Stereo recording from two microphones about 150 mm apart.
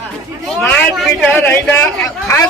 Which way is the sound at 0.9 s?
5° left (ahead or behind).